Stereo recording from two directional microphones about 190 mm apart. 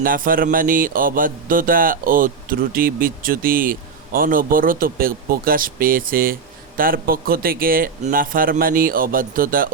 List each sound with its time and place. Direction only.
0.0 s mantra: 50° right (ahead or behind)